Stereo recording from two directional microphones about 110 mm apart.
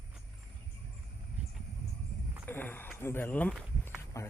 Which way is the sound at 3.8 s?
25° left (ahead or behind).